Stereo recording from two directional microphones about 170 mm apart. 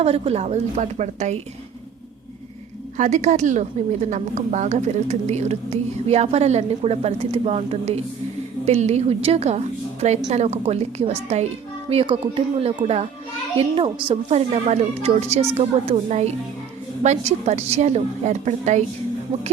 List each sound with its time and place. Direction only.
0.0 s a woman's voice: 35° right (ahead or behind)
3.0 s a woman's voice: 45° right (ahead or behind)